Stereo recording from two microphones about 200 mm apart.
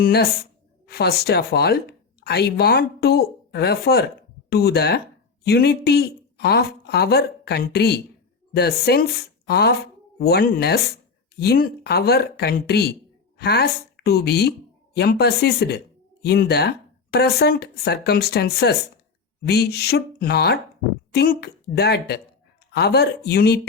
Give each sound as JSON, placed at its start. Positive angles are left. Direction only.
{"t": 0.0, "sound": "speech", "side_deg": 50}